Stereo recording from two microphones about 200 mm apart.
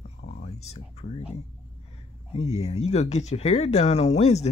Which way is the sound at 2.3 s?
30° left (ahead or behind).